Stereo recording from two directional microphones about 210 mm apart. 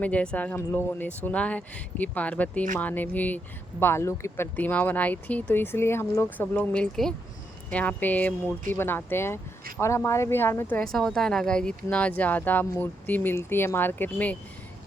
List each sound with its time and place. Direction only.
0.0 s speech: 5° left (ahead or behind)